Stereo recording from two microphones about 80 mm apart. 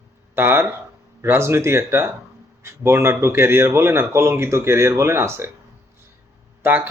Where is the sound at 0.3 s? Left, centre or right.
Right.